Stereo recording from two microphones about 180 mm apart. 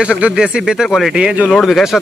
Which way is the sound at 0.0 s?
5° right (ahead or behind).